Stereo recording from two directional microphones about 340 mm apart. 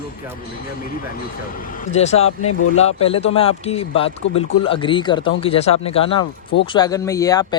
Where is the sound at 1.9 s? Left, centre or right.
Centre.